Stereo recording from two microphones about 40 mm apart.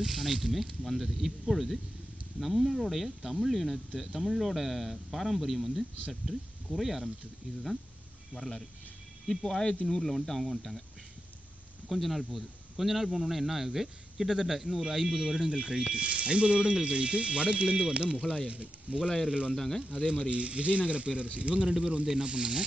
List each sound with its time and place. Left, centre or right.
0.0 s speech: centre
8.4 s speech: centre
11.9 s speech: centre; by 18.9 s right
19.5 s speech: centre
20.1 s speech: right